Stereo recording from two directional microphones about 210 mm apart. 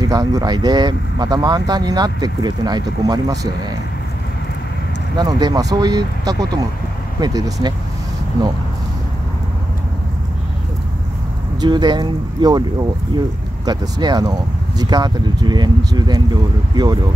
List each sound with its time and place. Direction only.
0.0 s speech: 15° right (ahead or behind)
5.1 s speech: 20° right (ahead or behind)
11.6 s speech: 20° right (ahead or behind)
13.7 s speech: 20° right (ahead or behind)